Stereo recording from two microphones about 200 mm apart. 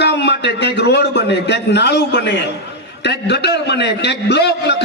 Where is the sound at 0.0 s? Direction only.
60° left (ahead or behind).